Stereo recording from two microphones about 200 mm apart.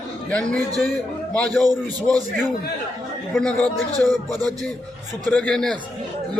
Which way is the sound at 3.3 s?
5° left (ahead or behind).